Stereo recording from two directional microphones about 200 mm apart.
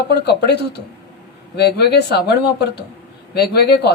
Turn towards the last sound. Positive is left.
turn(degrees=55)  # may be behind; listen again after turning